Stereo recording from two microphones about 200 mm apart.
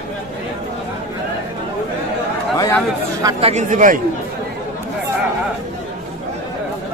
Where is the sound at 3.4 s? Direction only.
35° right (ahead or behind).